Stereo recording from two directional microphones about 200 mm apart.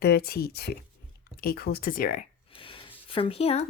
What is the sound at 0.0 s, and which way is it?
Speech, 50° left (ahead or behind).